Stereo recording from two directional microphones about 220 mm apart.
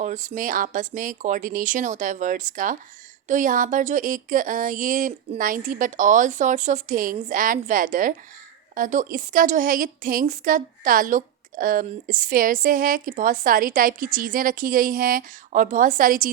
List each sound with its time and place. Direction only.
0.0 s a woman's voice: 35° right (ahead or behind)